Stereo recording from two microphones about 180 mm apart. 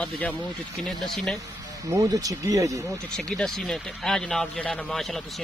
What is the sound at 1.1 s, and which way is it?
Speech, centre (ahead or behind).